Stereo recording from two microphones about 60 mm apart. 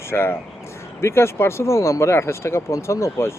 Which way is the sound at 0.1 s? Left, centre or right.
Left.